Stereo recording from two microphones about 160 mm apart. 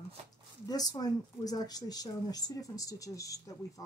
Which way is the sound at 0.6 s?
25° left (ahead or behind).